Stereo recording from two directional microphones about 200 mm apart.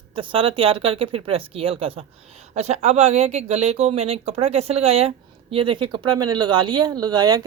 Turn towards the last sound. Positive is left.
turn(degrees=-20)  # may be behind; listen again after turning